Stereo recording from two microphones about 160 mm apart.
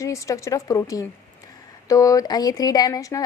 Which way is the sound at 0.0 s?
20° left (ahead or behind).